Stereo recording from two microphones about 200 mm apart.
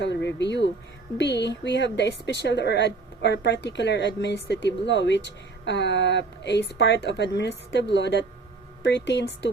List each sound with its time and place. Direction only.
0.0 s speech: 60° left (ahead or behind)